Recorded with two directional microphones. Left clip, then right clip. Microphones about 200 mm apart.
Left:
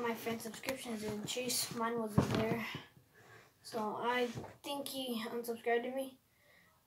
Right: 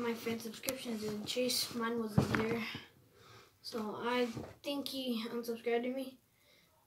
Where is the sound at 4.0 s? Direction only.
10° right (ahead or behind).